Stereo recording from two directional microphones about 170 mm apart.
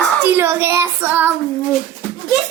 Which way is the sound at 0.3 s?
15° right (ahead or behind).